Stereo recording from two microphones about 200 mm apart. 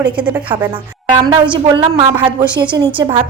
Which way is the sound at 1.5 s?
20° right (ahead or behind).